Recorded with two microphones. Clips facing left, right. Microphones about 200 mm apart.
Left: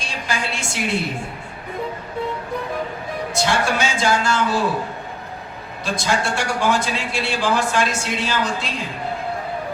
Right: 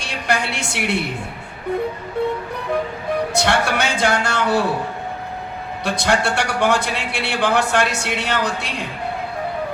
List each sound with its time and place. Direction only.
0.0 s a woman's voice: 65° right (ahead or behind)
3.3 s a man's voice: 65° right (ahead or behind)
5.8 s a man's voice: 65° right (ahead or behind)